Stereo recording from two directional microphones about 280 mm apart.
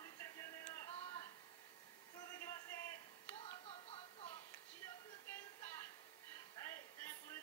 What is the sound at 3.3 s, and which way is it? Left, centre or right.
Music, left.